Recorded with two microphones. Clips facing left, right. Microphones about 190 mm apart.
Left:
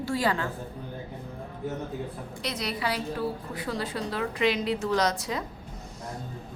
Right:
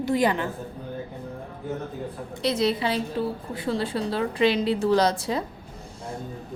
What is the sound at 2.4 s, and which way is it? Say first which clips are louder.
A woman's voice: right 9 dB; 25° right (ahead or behind).